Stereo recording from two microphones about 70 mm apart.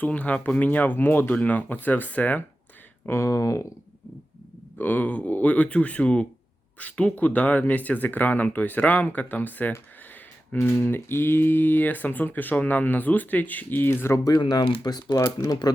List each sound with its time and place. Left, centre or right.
0.0 s speech: left
3.1 s speech: left
4.8 s speech: left
14.3 s speech: left
15.1 s speech: left